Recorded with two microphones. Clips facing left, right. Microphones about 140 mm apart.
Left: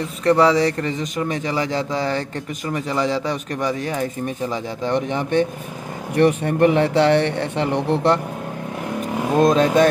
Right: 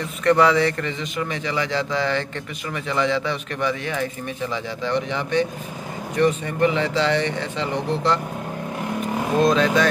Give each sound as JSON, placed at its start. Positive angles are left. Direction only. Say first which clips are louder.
{"t": 0.2, "sound": "speech", "louder": "left 2 dB", "side_deg": 30}
{"t": 9.4, "sound": "speech", "louder": "left 4 dB", "side_deg": 45}